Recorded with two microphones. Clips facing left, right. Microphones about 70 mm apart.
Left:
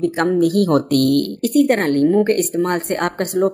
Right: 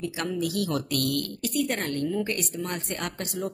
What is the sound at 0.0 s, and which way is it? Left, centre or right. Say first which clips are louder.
Speech: left 13 dB; left.